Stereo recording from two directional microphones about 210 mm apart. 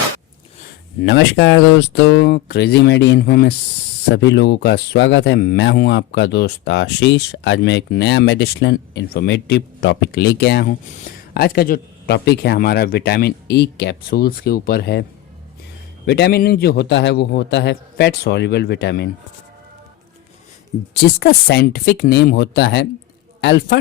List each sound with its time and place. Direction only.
1.0 s speech: 55° left (ahead or behind)
16.0 s speech: 50° left (ahead or behind)
20.9 s speech: 45° left (ahead or behind)